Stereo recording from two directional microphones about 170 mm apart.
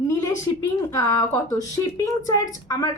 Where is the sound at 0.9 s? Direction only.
20° left (ahead or behind).